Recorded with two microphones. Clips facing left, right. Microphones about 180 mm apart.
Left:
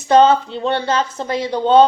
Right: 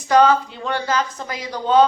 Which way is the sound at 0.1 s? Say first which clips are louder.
Left 3 dB; 25° left (ahead or behind).